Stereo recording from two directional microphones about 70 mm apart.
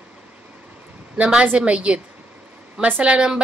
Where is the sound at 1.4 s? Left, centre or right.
Centre.